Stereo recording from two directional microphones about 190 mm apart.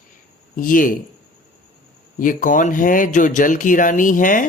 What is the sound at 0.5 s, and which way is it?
Speech, 45° left (ahead or behind).